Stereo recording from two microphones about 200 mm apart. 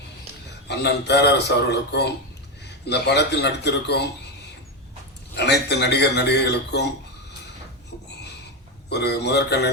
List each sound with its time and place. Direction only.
0.7 s a man's voice: 60° left (ahead or behind)
5.3 s a man's voice: 55° left (ahead or behind)
8.9 s a man's voice: 55° left (ahead or behind)